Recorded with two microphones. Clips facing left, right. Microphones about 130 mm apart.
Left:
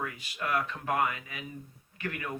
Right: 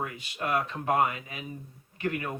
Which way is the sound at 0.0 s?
25° right (ahead or behind).